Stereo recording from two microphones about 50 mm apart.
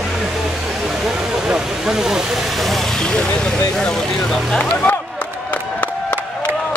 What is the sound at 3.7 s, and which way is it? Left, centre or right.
Speech, centre.